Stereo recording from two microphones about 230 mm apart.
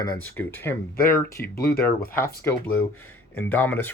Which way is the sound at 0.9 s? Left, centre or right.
Left.